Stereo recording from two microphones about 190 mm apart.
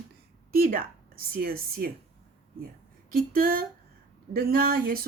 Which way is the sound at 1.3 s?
50° right (ahead or behind).